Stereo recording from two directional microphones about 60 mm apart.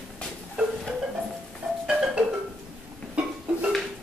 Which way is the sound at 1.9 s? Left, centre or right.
Centre.